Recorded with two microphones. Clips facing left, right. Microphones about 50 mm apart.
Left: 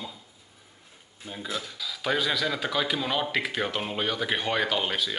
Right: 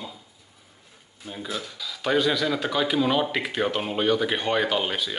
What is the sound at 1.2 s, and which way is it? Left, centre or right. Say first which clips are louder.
Speech: right 1 dB; centre.